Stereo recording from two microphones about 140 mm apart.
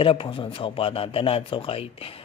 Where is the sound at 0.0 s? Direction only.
40° left (ahead or behind).